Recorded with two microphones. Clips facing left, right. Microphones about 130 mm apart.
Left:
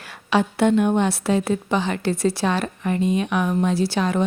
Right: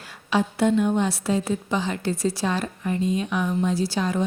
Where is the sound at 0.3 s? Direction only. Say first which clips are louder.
Left 3 dB; 70° left (ahead or behind).